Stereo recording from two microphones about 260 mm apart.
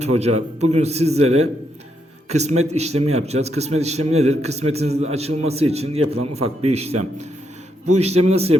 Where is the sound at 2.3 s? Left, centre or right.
Right.